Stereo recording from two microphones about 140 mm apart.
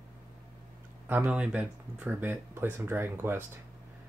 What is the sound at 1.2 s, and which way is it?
Speech, 10° right (ahead or behind).